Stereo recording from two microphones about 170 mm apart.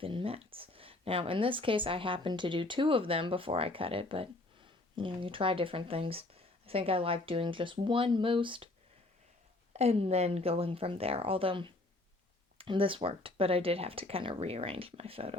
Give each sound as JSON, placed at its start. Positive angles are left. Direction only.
{"t": 0.0, "sound": "speech", "side_deg": -30}
{"t": 9.7, "sound": "speech", "side_deg": -40}